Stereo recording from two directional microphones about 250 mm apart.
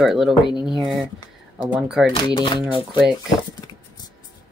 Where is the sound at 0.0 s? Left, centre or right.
Centre.